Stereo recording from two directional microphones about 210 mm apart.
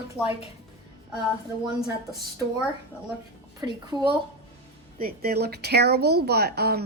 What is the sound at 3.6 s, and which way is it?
Speech, 20° right (ahead or behind).